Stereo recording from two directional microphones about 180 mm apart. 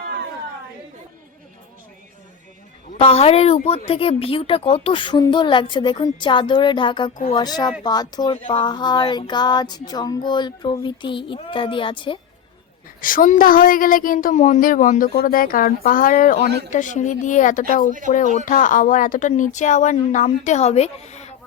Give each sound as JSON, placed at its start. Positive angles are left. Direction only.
{"t": 3.1, "sound": "speech", "side_deg": 35}
{"t": 3.8, "sound": "a sound", "side_deg": 30}
{"t": 13.0, "sound": "speech", "side_deg": 50}